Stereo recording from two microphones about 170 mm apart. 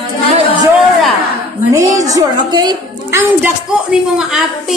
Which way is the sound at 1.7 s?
20° right (ahead or behind).